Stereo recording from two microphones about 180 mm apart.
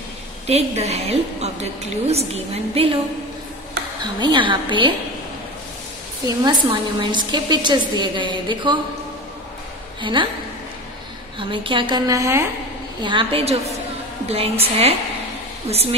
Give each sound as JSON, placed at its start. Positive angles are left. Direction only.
{"t": 0.5, "sound": "a woman's voice", "side_deg": -35}
{"t": 4.0, "sound": "a woman's voice", "side_deg": -25}
{"t": 6.2, "sound": "a woman's voice", "side_deg": -25}
{"t": 10.1, "sound": "a woman's voice", "side_deg": -25}
{"t": 11.3, "sound": "a woman's voice", "side_deg": -30}
{"t": 13.0, "sound": "a woman's voice", "side_deg": -30}